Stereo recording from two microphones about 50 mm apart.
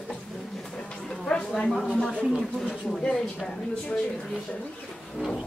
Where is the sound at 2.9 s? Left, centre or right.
Centre.